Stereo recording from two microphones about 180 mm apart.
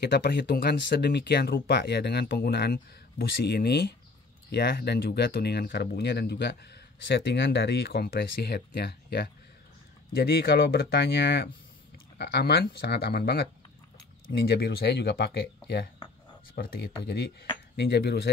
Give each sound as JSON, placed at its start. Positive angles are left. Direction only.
{"t": 0.0, "sound": "speech", "side_deg": 70}